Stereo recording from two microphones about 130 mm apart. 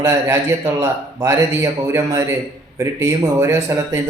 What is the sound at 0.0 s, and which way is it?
A man's voice, 20° right (ahead or behind).